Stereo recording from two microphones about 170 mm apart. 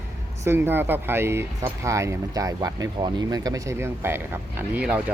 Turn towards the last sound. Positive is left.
turn(degrees=-10)  # may be behind; listen again after turning